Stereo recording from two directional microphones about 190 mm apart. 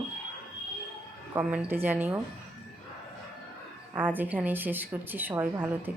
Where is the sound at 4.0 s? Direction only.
10° right (ahead or behind).